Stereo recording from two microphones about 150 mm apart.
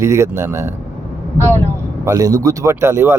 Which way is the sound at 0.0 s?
20° right (ahead or behind).